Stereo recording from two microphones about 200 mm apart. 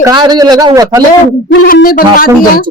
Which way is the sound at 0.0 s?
20° right (ahead or behind).